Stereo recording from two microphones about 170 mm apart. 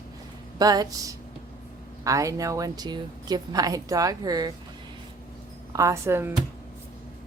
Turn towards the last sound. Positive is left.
turn(degrees=-15)  # may be behind; listen again after turning